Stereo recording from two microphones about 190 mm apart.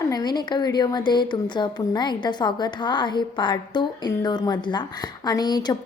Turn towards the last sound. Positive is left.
turn(degrees=20)  # may be behind; listen again after turning